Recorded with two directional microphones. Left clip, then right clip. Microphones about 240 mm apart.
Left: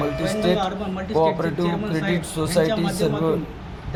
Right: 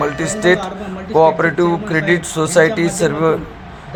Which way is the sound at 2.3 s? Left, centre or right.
Centre.